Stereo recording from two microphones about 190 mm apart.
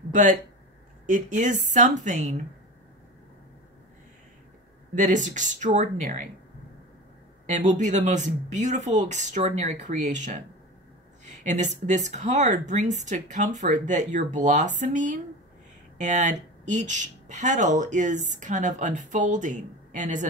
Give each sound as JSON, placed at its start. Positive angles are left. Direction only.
{"t": 0.1, "sound": "speech", "side_deg": -40}
{"t": 4.9, "sound": "speech", "side_deg": -40}
{"t": 7.4, "sound": "speech", "side_deg": -40}